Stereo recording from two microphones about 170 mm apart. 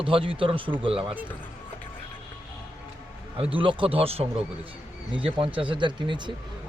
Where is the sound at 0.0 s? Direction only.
30° right (ahead or behind).